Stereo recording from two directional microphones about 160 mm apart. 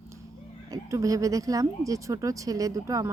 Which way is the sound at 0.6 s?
20° right (ahead or behind).